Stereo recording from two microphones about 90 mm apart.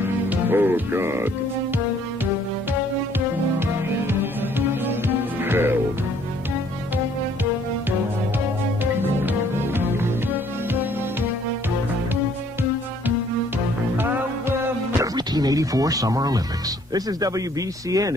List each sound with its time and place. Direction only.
0.3 s music: 25° right (ahead or behind)
4.1 s music: 25° right (ahead or behind)
13.9 s music: 20° right (ahead or behind)
15.1 s a sound: 45° right (ahead or behind)
16.9 s speech: 40° right (ahead or behind)